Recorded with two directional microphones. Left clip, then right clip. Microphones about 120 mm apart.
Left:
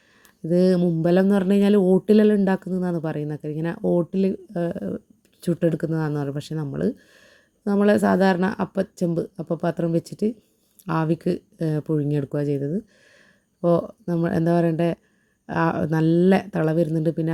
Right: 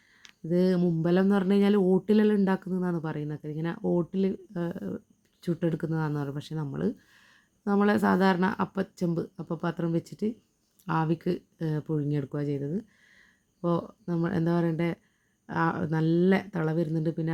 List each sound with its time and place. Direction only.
0.4 s speech: 40° left (ahead or behind)
3.8 s speech: 35° left (ahead or behind)